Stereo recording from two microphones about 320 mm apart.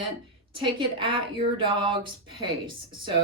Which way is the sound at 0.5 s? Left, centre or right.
Centre.